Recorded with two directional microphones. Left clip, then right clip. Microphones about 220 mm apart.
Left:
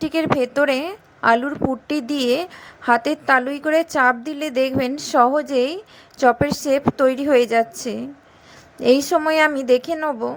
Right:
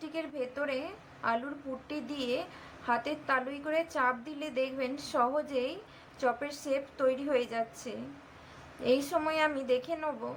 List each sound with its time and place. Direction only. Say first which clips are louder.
0.0 s a woman's voice: left 17 dB; 40° left (ahead or behind)